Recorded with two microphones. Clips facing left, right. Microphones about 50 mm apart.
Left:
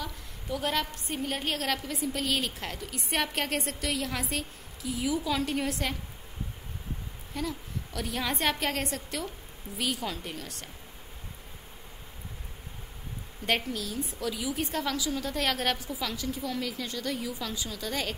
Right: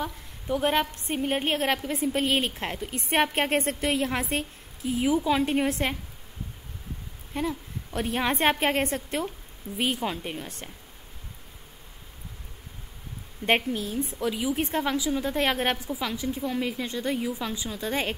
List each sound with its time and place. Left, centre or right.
0.0 s a woman's voice: right
7.3 s a woman's voice: right
13.5 s a woman's voice: right